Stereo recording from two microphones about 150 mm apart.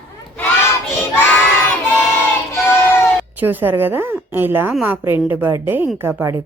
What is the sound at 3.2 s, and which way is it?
A woman's voice, 10° right (ahead or behind).